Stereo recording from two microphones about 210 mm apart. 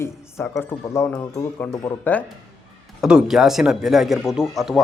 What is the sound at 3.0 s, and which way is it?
Speech, 5° right (ahead or behind).